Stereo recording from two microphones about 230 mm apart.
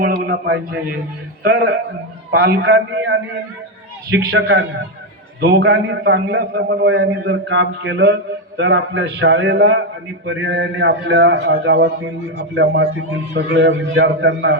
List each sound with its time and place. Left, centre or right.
0.0 s a man's voice: right
2.3 s a man's voice: right